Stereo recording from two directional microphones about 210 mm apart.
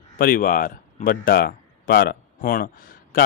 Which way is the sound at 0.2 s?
40° left (ahead or behind).